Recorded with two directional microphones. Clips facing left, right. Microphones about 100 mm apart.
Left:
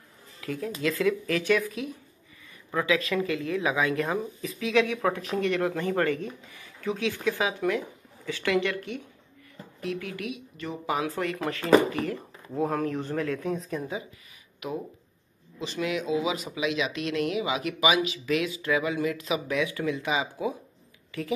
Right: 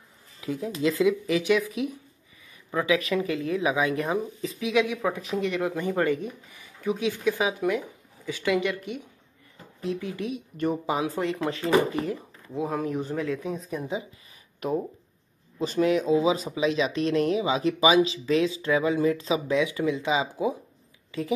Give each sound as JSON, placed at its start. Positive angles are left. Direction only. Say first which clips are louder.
{"t": 0.4, "sound": "speech", "louder": "right 3 dB", "side_deg": -20}
{"t": 4.4, "sound": "speech", "louder": "right 2 dB", "side_deg": -30}
{"t": 4.6, "sound": "speech", "louder": "even", "side_deg": -10}
{"t": 10.3, "sound": "speech", "louder": "right 8 dB", "side_deg": -50}
{"t": 10.9, "sound": "speech", "louder": "right 2 dB", "side_deg": -20}
{"t": 14.6, "sound": "speech", "louder": "right 6 dB", "side_deg": -40}